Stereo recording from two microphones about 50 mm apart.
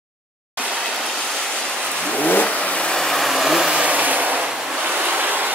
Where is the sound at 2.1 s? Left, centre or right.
Left.